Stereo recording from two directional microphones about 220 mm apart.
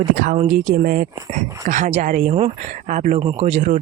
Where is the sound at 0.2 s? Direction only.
35° right (ahead or behind).